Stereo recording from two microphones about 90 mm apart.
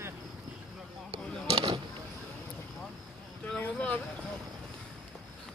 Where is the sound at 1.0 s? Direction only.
70° right (ahead or behind).